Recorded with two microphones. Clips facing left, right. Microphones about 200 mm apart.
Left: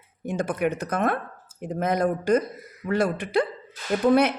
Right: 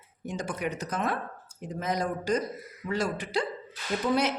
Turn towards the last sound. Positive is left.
turn(degrees=55)  # may be behind; listen again after turning